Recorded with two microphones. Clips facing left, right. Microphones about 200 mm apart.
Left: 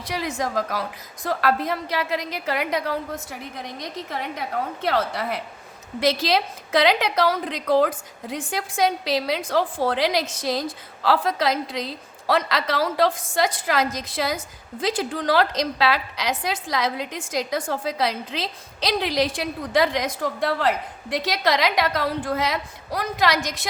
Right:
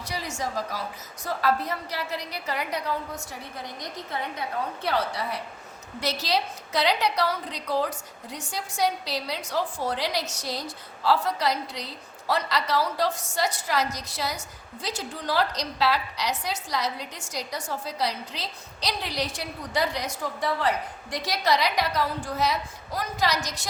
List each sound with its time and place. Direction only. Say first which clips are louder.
0.4 s a woman's voice: left 3 dB; 50° left (ahead or behind)
1.3 s a woman's voice: left 3 dB; 75° left (ahead or behind)
3.9 s a woman's voice: left 2 dB; 90° left
6.0 s a woman's voice: left 6 dB; 90° left